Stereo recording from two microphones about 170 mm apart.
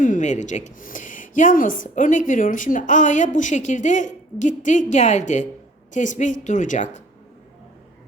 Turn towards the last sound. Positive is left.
turn(degrees=45)  # may be behind; listen again after turning